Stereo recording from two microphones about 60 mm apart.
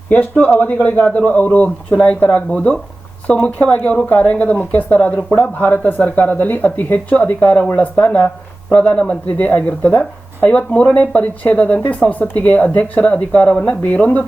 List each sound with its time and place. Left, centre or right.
0.1 s speech: left